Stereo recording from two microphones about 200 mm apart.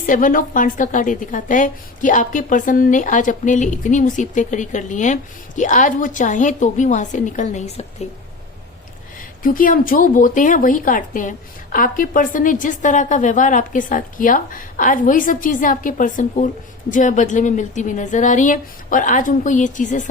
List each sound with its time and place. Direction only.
0.0 s a woman's voice: 45° left (ahead or behind)
9.4 s a woman's voice: 45° left (ahead or behind)